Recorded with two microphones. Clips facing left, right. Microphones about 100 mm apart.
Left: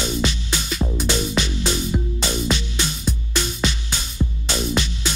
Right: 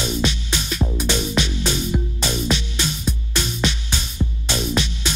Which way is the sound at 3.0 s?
5° right (ahead or behind).